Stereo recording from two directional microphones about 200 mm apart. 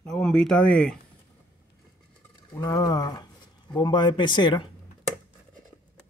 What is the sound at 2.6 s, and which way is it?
Speech, 20° left (ahead or behind).